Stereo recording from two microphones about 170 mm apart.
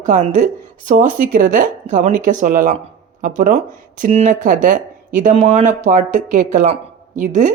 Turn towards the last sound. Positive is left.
turn(degrees=-50)  # may be behind; listen again after turning